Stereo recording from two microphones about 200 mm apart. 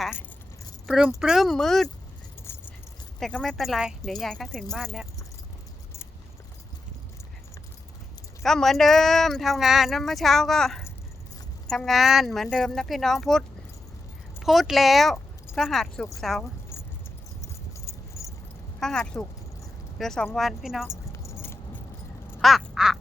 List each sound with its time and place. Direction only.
0.9 s speech: 5° right (ahead or behind)
2.5 s keys jangling: 10° left (ahead or behind)
3.2 s speech: 5° left (ahead or behind)
8.4 s speech: centre (ahead or behind)
17.7 s keys jangling: 15° left (ahead or behind)
18.8 s speech: centre (ahead or behind)
21.1 s keys jangling: 15° left (ahead or behind)
22.4 s quack: centre (ahead or behind)